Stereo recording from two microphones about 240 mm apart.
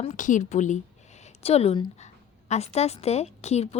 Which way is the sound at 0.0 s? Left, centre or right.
Left.